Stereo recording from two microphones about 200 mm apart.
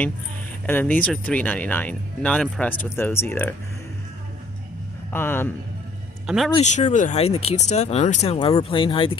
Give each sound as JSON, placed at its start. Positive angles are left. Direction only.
{"t": 0.7, "sound": "speech", "side_deg": 10}
{"t": 5.1, "sound": "speech", "side_deg": 10}
{"t": 6.2, "sound": "speech", "side_deg": 0}
{"t": 6.5, "sound": "speech", "side_deg": 35}